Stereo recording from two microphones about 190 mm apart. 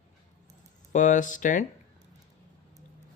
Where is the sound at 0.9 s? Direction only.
40° left (ahead or behind).